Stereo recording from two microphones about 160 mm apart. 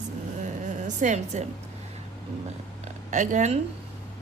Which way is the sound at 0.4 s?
50° right (ahead or behind).